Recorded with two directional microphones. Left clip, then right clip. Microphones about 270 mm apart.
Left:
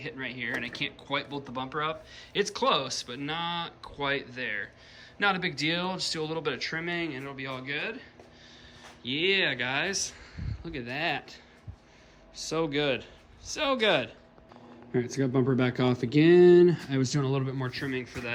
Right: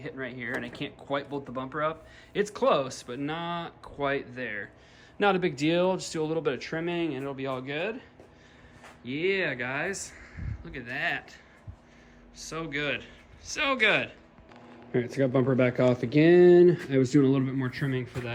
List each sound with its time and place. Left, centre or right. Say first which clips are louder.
0.0 s speech: left 1 dB; centre
9.0 s speech: left 2 dB; centre
12.4 s speech: left 4 dB; centre